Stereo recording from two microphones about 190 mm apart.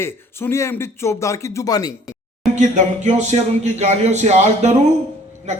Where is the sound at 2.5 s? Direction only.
40° right (ahead or behind).